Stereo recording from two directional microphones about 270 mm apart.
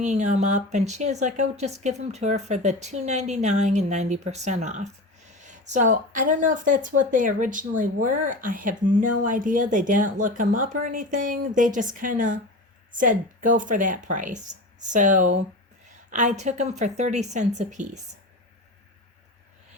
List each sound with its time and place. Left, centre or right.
0.0 s speech: right